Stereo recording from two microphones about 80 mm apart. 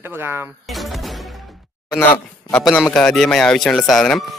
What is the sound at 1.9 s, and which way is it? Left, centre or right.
Speech, left.